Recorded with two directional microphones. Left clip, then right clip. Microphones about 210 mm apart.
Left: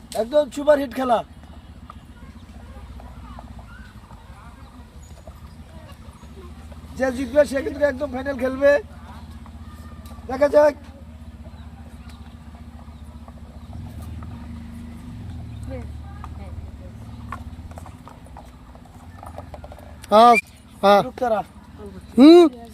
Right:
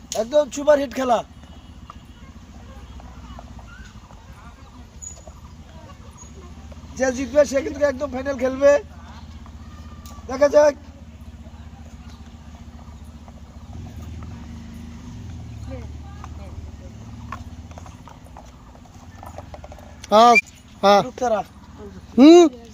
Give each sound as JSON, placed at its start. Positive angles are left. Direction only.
{"t": 0.2, "sound": "speech", "side_deg": -20}
{"t": 6.9, "sound": "speech", "side_deg": -15}
{"t": 10.2, "sound": "speech", "side_deg": -15}
{"t": 20.0, "sound": "speech", "side_deg": -5}
{"t": 21.2, "sound": "speech", "side_deg": -20}
{"t": 22.1, "sound": "speech", "side_deg": 0}